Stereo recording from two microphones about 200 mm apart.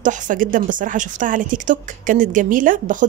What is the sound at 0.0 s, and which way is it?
A woman's voice, 40° right (ahead or behind).